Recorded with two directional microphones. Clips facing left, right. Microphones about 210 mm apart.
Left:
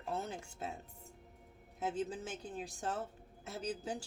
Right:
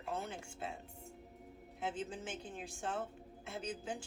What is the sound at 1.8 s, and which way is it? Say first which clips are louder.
A woman's voice: left 3 dB; 40° left (ahead or behind).